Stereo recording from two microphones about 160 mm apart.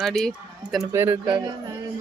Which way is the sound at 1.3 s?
25° right (ahead or behind).